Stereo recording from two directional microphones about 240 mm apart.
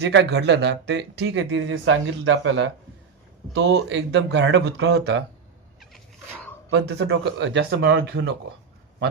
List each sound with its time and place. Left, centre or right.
0.0 s speech: right
6.7 s speech: right